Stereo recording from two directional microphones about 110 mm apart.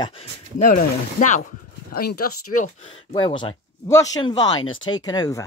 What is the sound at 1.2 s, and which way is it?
Speech, 90° left.